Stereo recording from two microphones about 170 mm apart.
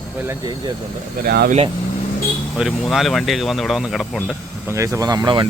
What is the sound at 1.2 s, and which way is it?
Speech, 65° right (ahead or behind).